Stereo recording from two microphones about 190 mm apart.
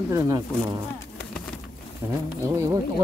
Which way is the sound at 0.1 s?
15° right (ahead or behind).